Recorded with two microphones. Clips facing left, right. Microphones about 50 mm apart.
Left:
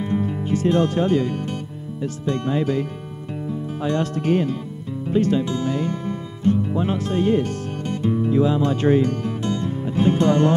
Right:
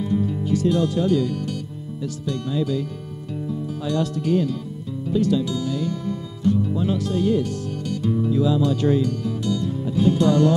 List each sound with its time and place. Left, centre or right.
0.0 s speech: left
5.0 s music: left